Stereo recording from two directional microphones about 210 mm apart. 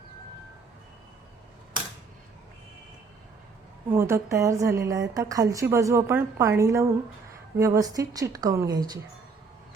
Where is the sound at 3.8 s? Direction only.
10° right (ahead or behind).